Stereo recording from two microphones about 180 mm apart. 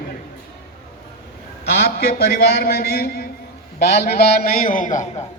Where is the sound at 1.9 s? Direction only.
60° left (ahead or behind); by 5.2 s 45° left (ahead or behind).